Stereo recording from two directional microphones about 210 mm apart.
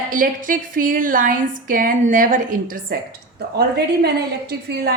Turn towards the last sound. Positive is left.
turn(degrees=-50)  # may be behind; listen again after turning